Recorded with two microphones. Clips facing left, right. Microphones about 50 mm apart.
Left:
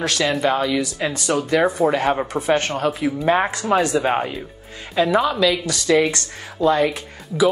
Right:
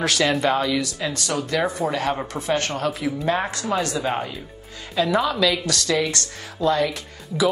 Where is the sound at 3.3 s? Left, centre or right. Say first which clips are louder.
Left 6 dB; left.